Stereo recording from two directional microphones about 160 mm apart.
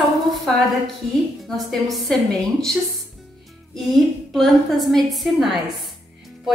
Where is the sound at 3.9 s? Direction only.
Centre (ahead or behind).